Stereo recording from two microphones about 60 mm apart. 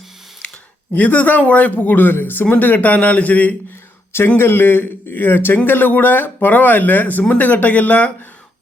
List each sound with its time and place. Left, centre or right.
0.4 s a sound: centre
0.9 s speech: left
4.4 s a man's voice: left